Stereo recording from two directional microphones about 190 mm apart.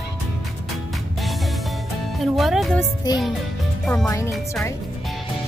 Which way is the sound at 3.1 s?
20° left (ahead or behind).